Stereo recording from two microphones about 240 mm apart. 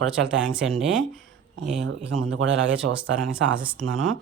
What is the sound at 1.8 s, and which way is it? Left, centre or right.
Speech, right.